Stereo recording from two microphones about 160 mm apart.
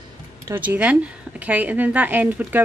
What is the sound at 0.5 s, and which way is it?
A woman's voice, 10° right (ahead or behind).